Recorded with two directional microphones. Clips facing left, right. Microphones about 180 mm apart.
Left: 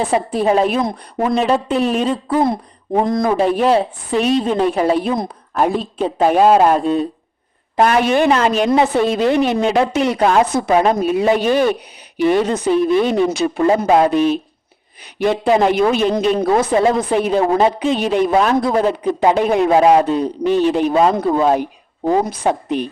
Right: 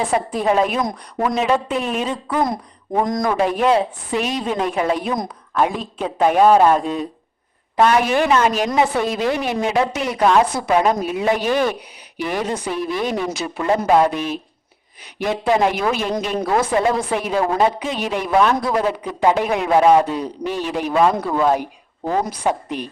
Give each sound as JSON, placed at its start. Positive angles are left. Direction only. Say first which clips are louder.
{"t": 0.1, "sound": "a woman's voice", "louder": "left 3 dB", "side_deg": 30}